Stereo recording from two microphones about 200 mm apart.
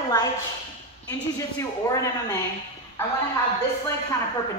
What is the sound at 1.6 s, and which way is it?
Speech, 15° left (ahead or behind).